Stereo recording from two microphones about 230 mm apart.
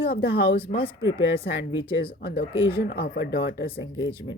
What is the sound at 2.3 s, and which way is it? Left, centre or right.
Speech, left.